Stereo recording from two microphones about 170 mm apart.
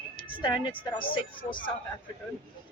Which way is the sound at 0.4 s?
30° left (ahead or behind).